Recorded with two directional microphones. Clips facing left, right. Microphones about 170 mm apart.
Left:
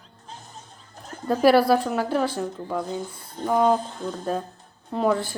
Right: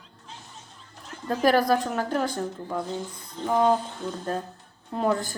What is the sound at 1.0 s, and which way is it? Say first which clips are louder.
Bird: left 4 dB; 40° left (ahead or behind).